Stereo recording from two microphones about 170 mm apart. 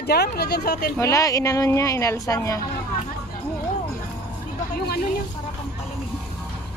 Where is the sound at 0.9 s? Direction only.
20° left (ahead or behind).